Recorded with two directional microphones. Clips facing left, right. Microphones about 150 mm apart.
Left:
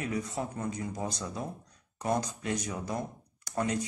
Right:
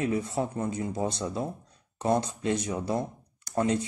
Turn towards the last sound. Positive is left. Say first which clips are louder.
# right 5 dB
turn(degrees=-25)  # may be behind; listen again after turning